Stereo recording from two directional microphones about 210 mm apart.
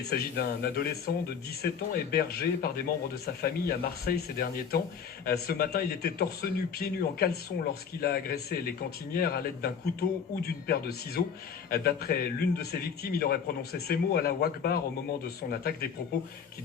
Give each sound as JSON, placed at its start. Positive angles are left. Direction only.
{"t": 0.1, "sound": "speech", "side_deg": 50}